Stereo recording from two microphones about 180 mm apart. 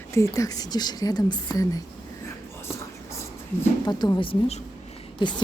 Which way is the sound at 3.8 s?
25° left (ahead or behind).